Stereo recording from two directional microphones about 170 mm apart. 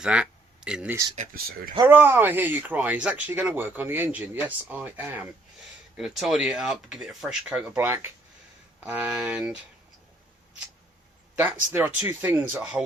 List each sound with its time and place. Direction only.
0.0 s a sound: 5° right (ahead or behind)
1.5 s speech: 60° right (ahead or behind)
1.9 s speech: 10° right (ahead or behind)
11.3 s speech: 10° right (ahead or behind)